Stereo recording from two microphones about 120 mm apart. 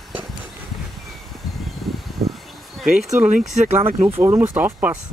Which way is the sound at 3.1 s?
15° right (ahead or behind).